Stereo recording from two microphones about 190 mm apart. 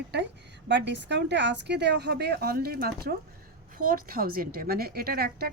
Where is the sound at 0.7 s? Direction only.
65° right (ahead or behind).